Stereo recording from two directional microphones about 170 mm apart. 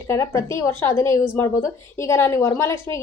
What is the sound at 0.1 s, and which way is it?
Speech, 15° left (ahead or behind).